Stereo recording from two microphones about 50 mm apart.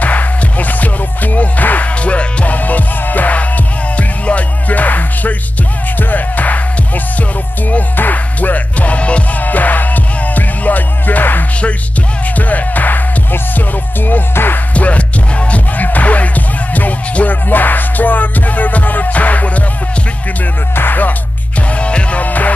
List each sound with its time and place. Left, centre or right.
0.0 s music: left
7.7 s music: left
14.7 s music: left
20.7 s music: left
21.7 s music: left